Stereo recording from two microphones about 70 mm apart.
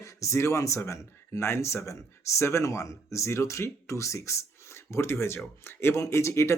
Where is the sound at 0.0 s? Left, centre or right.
Left.